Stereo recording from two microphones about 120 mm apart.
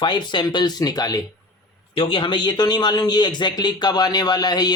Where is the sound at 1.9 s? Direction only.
50° left (ahead or behind).